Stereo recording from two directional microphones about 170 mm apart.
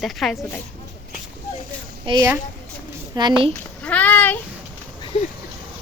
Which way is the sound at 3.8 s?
10° left (ahead or behind).